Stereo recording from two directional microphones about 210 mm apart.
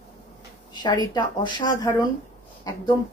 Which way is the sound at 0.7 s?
20° left (ahead or behind).